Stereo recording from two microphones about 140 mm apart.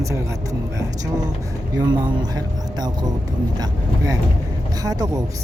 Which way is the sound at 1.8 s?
30° right (ahead or behind).